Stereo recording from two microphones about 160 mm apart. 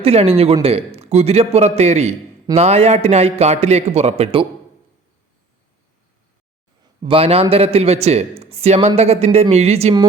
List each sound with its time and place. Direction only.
0.0 s a man's voice: 40° right (ahead or behind)
7.0 s a man's voice: 35° right (ahead or behind)